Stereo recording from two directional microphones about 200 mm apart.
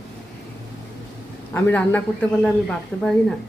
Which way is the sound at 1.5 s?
10° left (ahead or behind).